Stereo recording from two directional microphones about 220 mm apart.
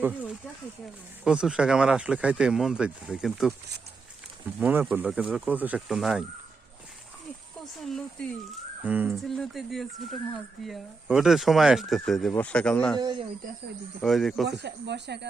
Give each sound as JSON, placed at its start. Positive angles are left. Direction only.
{"t": 1.2, "sound": "speech", "side_deg": -5}
{"t": 4.6, "sound": "speech", "side_deg": -10}
{"t": 7.8, "sound": "speech", "side_deg": 0}
{"t": 13.0, "sound": "speech", "side_deg": -20}
{"t": 14.0, "sound": "speech", "side_deg": 0}
{"t": 14.5, "sound": "speech", "side_deg": -50}